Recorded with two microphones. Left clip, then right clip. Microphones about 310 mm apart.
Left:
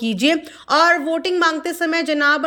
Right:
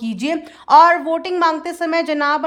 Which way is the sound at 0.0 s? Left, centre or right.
Centre.